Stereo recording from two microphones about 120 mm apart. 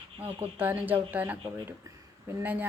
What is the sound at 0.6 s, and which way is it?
Speech, 15° right (ahead or behind).